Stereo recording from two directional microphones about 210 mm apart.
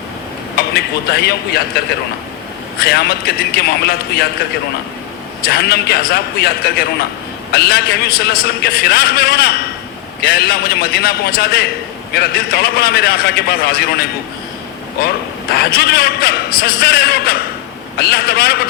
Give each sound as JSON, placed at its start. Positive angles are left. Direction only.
{"t": 0.5, "sound": "a man's voice", "side_deg": 50}
{"t": 2.8, "sound": "a man's voice", "side_deg": 50}
{"t": 5.5, "sound": "a man's voice", "side_deg": 50}
{"t": 15.5, "sound": "a man's voice", "side_deg": 50}